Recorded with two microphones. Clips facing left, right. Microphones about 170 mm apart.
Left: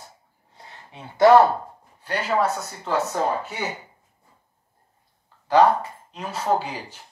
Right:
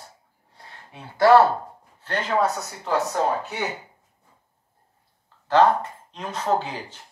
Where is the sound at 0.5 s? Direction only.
20° left (ahead or behind).